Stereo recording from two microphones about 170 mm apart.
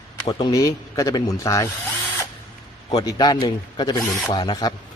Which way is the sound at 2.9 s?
25° left (ahead or behind).